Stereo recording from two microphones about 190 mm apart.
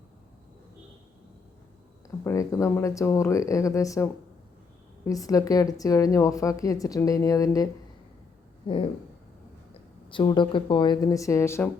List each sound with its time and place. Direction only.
2.2 s a woman's voice: 15° left (ahead or behind)
8.6 s speech: 30° left (ahead or behind)
10.1 s speech: 25° left (ahead or behind)